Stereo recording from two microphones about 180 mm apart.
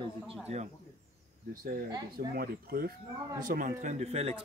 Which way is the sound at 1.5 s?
50° right (ahead or behind).